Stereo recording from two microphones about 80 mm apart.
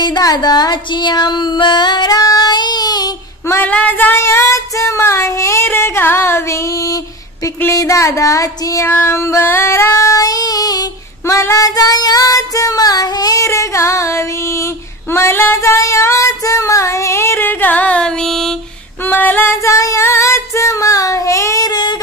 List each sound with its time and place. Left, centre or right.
0.0 s music: left
3.6 s a sound: centre
4.2 s female singing: left
7.4 s speech: left
8.8 s child singing: left
11.2 s child singing: left; by 18.5 s centre
19.0 s female singing: left
19.6 s child singing: left
21.6 s child singing: left